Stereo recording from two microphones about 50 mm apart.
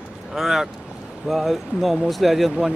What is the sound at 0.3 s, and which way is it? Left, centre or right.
Speech, centre.